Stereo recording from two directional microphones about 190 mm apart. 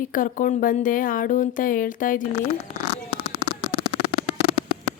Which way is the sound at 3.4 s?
30° left (ahead or behind).